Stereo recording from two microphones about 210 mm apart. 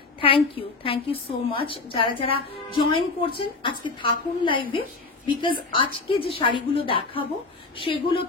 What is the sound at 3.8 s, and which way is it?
Speech, 25° left (ahead or behind).